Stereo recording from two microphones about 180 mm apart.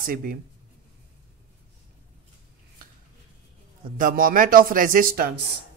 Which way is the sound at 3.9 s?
50° right (ahead or behind).